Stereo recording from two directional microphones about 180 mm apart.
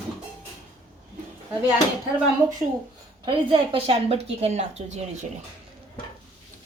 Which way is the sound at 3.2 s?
30° right (ahead or behind).